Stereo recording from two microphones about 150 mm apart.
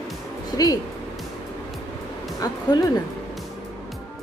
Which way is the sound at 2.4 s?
25° left (ahead or behind).